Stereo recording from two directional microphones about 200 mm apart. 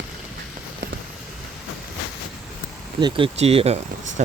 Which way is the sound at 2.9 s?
25° right (ahead or behind).